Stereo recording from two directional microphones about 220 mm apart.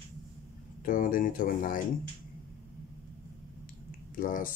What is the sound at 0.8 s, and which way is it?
Speech, 40° left (ahead or behind).